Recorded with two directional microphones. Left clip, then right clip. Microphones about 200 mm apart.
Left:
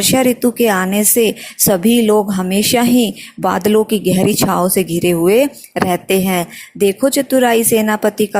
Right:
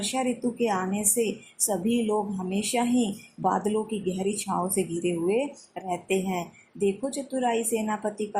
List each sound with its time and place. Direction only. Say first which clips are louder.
0.1 s a woman's voice: left 14 dB; 40° left (ahead or behind)